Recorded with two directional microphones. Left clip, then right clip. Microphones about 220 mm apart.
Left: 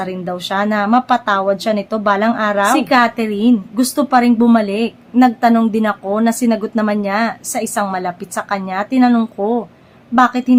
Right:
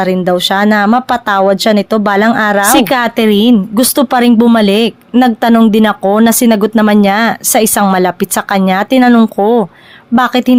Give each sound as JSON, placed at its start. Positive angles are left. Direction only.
{"t": 0.0, "sound": "a woman's voice", "side_deg": -35}